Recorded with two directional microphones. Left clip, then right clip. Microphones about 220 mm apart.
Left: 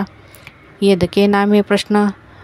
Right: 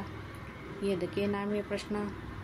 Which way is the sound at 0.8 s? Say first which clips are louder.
Left 19 dB; 50° left (ahead or behind).